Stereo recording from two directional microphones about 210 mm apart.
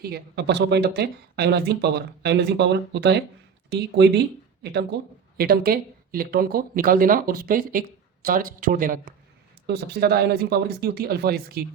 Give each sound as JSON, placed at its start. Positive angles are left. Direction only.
{"t": 0.0, "sound": "speech", "side_deg": -50}